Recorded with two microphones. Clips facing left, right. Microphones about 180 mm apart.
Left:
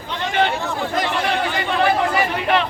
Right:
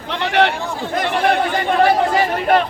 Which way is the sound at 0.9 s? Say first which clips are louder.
Right 6 dB; 55° right (ahead or behind).